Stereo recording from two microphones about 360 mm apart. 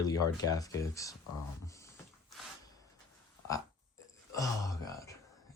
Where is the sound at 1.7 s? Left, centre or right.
Centre.